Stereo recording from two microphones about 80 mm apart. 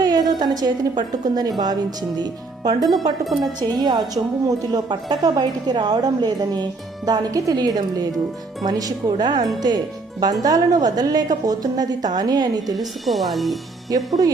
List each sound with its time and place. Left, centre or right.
0.0 s a woman's voice: right
3.2 s speech: centre
3.7 s a woman's voice: right
9.6 s a woman's voice: right
12.7 s speech: centre
13.9 s a woman's voice: right